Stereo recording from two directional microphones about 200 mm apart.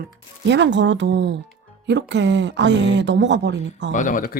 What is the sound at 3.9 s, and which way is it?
Speech, 40° left (ahead or behind).